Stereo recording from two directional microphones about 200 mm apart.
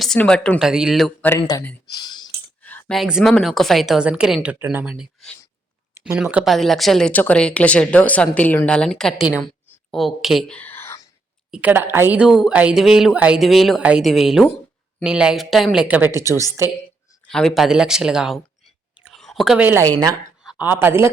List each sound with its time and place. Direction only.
0.0 s a woman's voice: 5° left (ahead or behind)
1.4 s speech: 20° left (ahead or behind)
1.9 s clicking: 20° left (ahead or behind)
2.6 s a woman's voice: 10° left (ahead or behind)
11.5 s a woman's voice: 10° right (ahead or behind)
17.2 s a woman's voice: 5° left (ahead or behind)
18.9 s a sound: centre (ahead or behind)
20.4 s a woman's voice: 5° right (ahead or behind)